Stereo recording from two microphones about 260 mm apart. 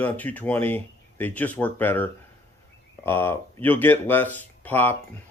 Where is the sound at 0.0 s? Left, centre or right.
Centre.